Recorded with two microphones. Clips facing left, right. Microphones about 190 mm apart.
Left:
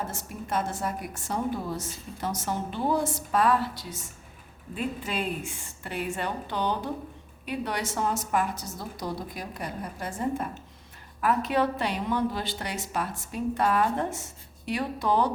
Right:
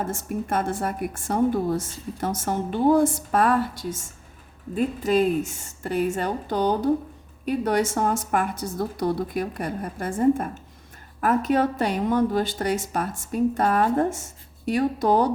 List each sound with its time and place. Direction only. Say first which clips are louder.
0.0 s a woman's voice: right 7 dB; 50° right (ahead or behind)